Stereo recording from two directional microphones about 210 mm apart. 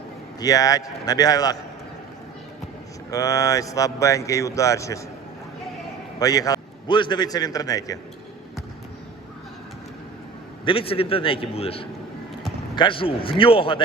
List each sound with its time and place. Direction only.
0.3 s speech: 15° left (ahead or behind)
3.1 s speech: 15° left (ahead or behind)
6.1 s a man's voice: 15° left (ahead or behind)
10.7 s a man's voice: 25° left (ahead or behind)